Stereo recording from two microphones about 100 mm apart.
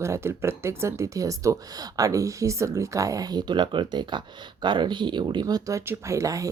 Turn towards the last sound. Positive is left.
turn(degrees=-35)  # may be behind; listen again after turning